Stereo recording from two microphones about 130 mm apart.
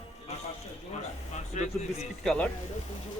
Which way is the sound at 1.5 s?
65° left (ahead or behind).